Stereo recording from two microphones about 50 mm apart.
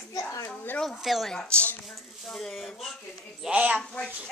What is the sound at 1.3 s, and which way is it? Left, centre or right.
Speech, centre.